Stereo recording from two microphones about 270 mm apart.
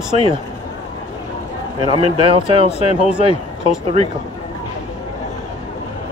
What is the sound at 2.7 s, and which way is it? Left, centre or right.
Speech, left.